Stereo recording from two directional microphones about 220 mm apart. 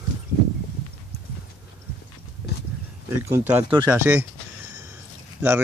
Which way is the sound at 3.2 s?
10° right (ahead or behind).